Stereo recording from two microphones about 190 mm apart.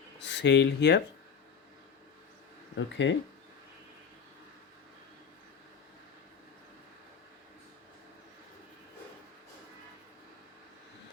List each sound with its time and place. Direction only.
0.2 s speech: 65° left (ahead or behind)
2.7 s speech: 75° left (ahead or behind)